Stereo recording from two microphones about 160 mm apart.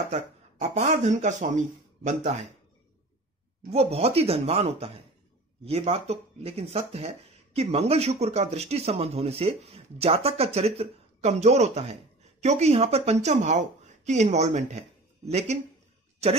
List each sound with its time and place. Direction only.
0.1 s speech: 45° right (ahead or behind)
3.7 s speech: 40° right (ahead or behind)